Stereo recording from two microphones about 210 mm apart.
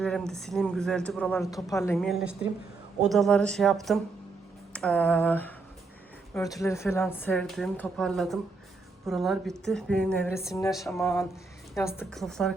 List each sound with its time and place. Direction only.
0.0 s a woman's voice: centre (ahead or behind)
1.5 s a woman's voice: 15° left (ahead or behind)
2.0 s a woman's voice: centre (ahead or behind)
6.6 s a woman's voice: 15° left (ahead or behind)